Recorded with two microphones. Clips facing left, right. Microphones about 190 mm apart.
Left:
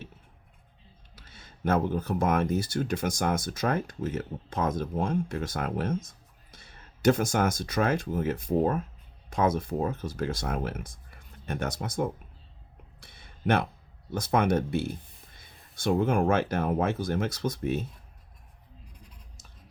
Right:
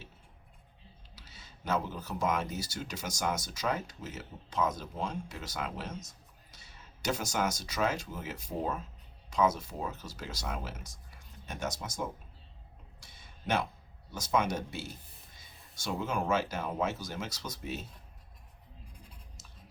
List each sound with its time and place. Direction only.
1.1 s speech: 50° left (ahead or behind)
13.0 s a sound: 60° left (ahead or behind)
14.1 s speech: 60° left (ahead or behind)